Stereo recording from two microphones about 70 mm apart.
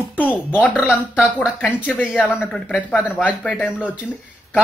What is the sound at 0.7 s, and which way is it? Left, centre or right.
Speech, centre.